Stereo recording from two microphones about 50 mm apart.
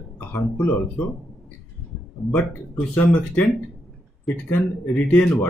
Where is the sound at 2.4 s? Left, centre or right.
Left.